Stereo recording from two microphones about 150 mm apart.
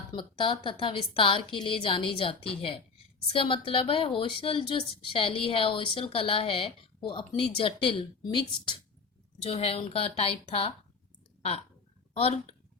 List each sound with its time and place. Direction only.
0.1 s a woman's voice: 30° left (ahead or behind)
12.1 s a woman's voice: 40° left (ahead or behind)